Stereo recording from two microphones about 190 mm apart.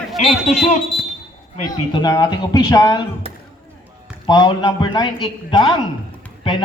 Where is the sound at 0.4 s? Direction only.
35° left (ahead or behind).